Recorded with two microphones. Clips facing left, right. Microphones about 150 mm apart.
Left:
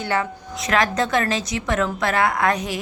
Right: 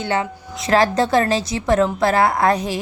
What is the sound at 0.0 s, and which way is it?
A woman's voice, 25° right (ahead or behind).